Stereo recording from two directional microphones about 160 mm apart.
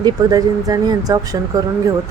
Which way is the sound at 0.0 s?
25° right (ahead or behind).